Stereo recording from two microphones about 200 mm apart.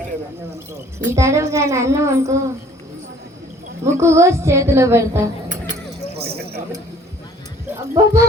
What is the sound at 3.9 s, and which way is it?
A woman's voice, 15° right (ahead or behind).